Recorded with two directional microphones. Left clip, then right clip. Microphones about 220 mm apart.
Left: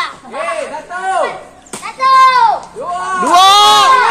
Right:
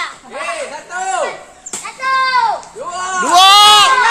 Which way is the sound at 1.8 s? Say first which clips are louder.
Left 8 dB; 35° left (ahead or behind).